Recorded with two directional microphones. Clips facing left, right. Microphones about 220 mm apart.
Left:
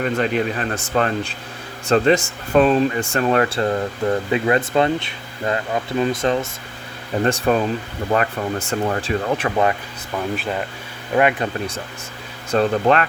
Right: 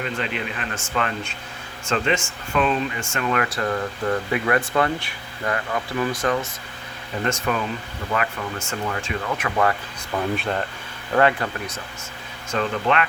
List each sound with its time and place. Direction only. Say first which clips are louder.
0.0 s speech: left 8 dB; 45° left (ahead or behind)
10.3 s speech: left 1 dB; 5° left (ahead or behind)
11.1 s speech: left 2 dB; 15° left (ahead or behind)
12.5 s speech: left 6 dB; 35° left (ahead or behind)